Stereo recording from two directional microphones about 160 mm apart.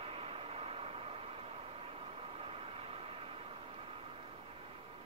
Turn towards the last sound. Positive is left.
turn(degrees=-35)  # may be behind; listen again after turning